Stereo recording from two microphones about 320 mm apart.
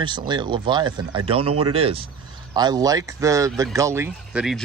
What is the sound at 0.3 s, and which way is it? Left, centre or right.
Speech, centre.